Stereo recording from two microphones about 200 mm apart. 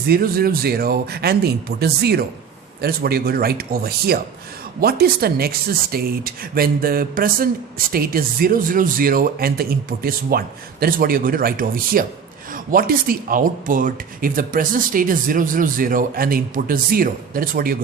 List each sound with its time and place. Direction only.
0.1 s speech: 50° right (ahead or behind)